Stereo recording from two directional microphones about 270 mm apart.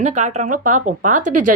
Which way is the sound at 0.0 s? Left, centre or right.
Right.